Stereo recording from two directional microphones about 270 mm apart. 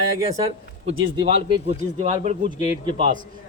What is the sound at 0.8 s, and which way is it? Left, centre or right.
Speech, right.